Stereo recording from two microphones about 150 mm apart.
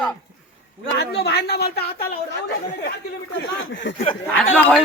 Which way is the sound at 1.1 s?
90° left.